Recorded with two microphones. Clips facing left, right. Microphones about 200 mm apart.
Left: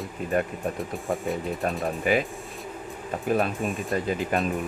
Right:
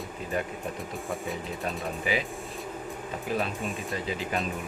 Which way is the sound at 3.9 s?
50° left (ahead or behind).